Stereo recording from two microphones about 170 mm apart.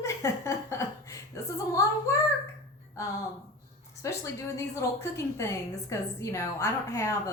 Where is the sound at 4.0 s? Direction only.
15° left (ahead or behind).